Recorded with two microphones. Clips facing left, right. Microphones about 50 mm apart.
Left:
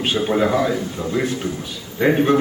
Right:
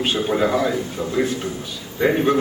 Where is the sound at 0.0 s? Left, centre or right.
Centre.